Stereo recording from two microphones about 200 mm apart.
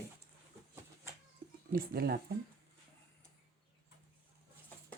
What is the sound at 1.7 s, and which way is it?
Speech, 50° right (ahead or behind).